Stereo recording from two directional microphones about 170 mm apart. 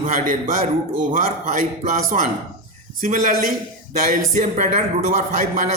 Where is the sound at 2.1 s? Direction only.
45° right (ahead or behind).